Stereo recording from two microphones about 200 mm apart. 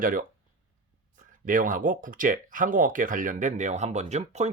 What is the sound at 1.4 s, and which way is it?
Speech, 45° right (ahead or behind).